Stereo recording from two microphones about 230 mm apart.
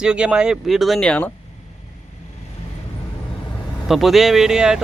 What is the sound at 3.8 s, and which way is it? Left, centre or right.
Speech, centre.